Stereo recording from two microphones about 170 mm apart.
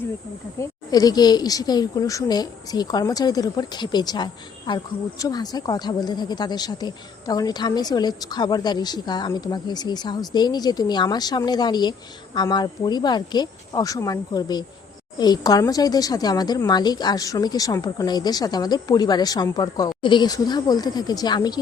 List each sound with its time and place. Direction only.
0.6 s speech: 20° left (ahead or behind)